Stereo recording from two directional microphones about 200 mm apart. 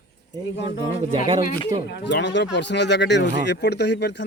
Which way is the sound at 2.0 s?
60° left (ahead or behind).